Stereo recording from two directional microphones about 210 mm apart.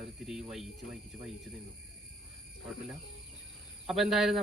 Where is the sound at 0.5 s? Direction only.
Centre (ahead or behind).